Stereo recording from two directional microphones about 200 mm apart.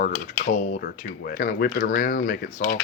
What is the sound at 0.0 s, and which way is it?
Speech, 40° left (ahead or behind).